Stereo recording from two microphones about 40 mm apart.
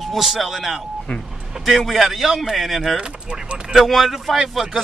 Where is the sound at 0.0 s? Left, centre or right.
Centre.